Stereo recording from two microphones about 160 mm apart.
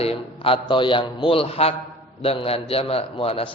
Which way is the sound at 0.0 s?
35° left (ahead or behind).